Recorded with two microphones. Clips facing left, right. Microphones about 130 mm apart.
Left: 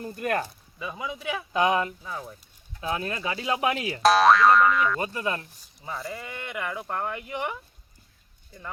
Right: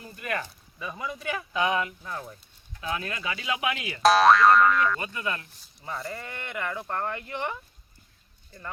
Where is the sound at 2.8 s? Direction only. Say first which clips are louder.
Left 3 dB; 30° left (ahead or behind).